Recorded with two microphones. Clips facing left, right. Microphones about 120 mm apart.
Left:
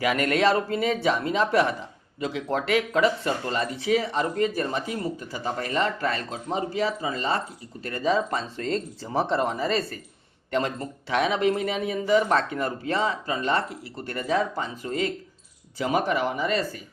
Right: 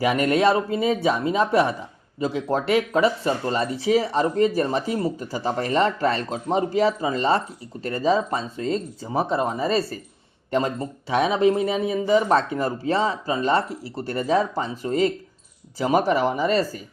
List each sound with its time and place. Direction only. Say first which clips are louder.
0.0 s speech: right 3 dB; 25° right (ahead or behind)
8.0 s speech: right 2 dB; 20° right (ahead or behind); by 16.6 s 35° right (ahead or behind)